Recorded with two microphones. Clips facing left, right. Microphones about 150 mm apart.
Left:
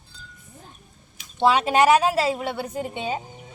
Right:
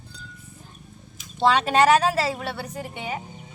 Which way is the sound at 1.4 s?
10° left (ahead or behind).